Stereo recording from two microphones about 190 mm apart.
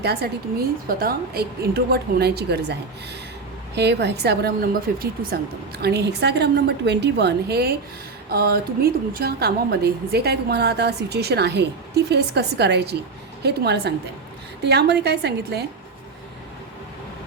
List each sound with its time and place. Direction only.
0.0 s a woman's voice: 55° right (ahead or behind)
3.8 s a woman's voice: 60° right (ahead or behind)